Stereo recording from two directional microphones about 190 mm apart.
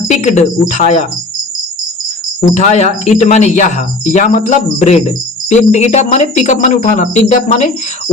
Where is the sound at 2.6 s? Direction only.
35° left (ahead or behind).